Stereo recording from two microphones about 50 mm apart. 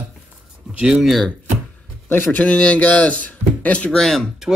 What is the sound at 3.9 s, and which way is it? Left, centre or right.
Speech, centre.